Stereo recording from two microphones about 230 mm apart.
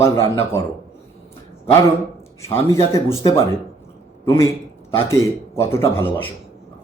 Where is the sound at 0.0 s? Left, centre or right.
Centre.